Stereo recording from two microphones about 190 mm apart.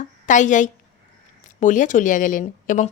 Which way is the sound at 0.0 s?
40° left (ahead or behind).